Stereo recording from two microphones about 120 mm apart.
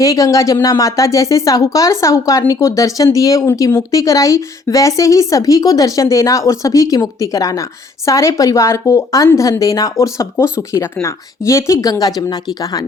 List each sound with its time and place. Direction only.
0.0 s a woman's voice: 25° left (ahead or behind)